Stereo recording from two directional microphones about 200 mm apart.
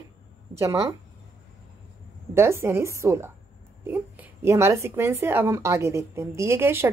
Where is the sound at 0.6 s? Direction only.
15° right (ahead or behind).